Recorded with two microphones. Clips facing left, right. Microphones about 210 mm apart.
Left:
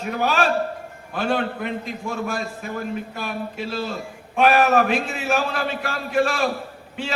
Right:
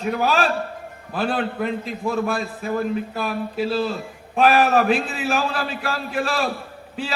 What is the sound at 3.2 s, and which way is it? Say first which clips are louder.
A man's voice: right 5 dB; 35° right (ahead or behind).